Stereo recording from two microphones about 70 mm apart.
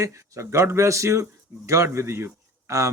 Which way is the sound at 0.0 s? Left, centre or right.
Right.